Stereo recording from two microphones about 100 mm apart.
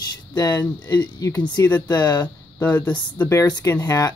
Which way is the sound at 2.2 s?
15° left (ahead or behind).